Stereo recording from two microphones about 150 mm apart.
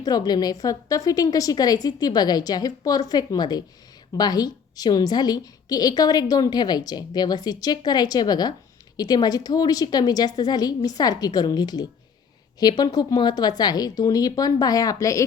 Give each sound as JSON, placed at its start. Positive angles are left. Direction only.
{"t": 0.0, "sound": "a woman's voice", "side_deg": 25}